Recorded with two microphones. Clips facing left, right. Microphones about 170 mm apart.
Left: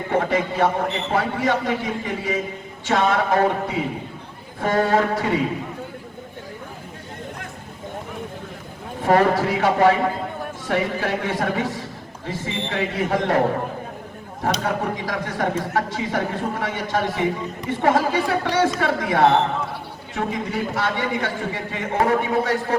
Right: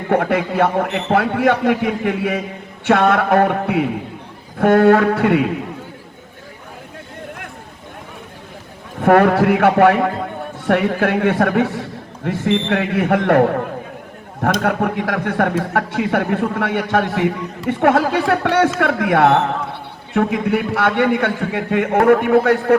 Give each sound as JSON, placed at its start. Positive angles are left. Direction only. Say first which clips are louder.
{"t": 0.1, "sound": "a man's voice", "louder": "right 5 dB", "side_deg": -60}
{"t": 9.0, "sound": "a man's voice", "louder": "right 5 dB", "side_deg": -60}
{"t": 14.4, "sound": "a man's voice", "louder": "right 5 dB", "side_deg": -60}